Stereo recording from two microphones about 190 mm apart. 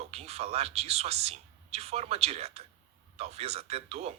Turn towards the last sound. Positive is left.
turn(degrees=-35)  # may be behind; listen again after turning